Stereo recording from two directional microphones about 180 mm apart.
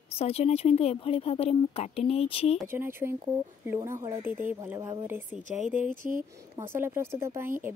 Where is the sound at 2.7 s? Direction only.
15° right (ahead or behind).